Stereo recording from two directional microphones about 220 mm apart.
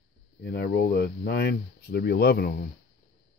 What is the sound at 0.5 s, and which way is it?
Speech, 45° left (ahead or behind).